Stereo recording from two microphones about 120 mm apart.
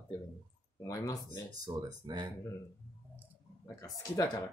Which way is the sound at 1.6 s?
35° right (ahead or behind).